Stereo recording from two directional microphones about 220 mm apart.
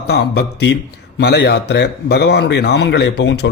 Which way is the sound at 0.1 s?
50° left (ahead or behind).